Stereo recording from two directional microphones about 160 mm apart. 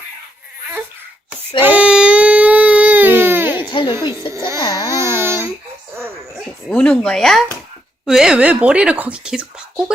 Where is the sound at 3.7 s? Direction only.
30° left (ahead or behind).